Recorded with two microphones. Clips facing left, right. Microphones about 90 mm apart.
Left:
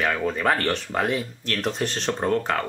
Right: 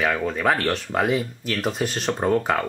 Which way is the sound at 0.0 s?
5° right (ahead or behind).